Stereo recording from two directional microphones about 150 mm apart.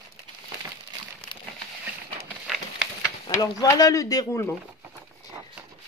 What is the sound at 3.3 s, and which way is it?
A woman's voice, 25° left (ahead or behind).